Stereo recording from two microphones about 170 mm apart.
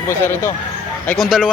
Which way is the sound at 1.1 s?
Centre (ahead or behind).